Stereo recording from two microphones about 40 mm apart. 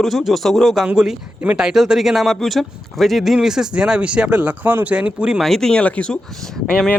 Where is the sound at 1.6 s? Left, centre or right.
Centre.